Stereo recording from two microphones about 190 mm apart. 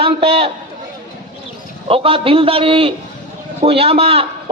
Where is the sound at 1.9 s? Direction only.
30° right (ahead or behind).